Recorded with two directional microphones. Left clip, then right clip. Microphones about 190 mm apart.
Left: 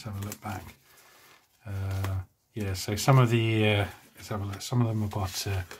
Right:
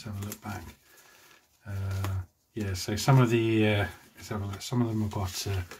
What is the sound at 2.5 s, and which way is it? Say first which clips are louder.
Speech: even; 25° left (ahead or behind).